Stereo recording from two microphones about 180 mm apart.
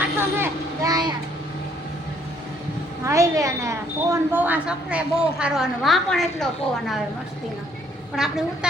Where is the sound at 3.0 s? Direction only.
15° right (ahead or behind); by 7.0 s centre (ahead or behind).